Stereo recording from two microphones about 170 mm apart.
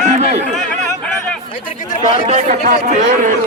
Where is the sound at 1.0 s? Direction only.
5° left (ahead or behind).